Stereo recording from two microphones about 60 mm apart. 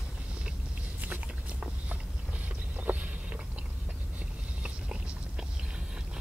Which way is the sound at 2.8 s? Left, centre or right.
Right.